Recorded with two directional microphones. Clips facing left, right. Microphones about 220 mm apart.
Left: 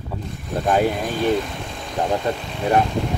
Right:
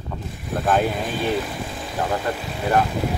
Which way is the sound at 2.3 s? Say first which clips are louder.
Left 2 dB; 25° left (ahead or behind).